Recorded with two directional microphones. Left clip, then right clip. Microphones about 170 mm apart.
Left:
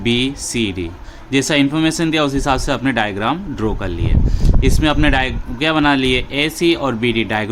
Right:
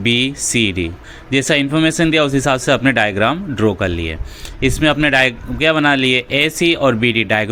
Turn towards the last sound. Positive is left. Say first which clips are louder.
# right 3 dB
turn(degrees=-20)  # may be behind; listen again after turning